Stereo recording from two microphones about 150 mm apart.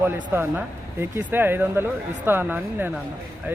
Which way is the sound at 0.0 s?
15° right (ahead or behind).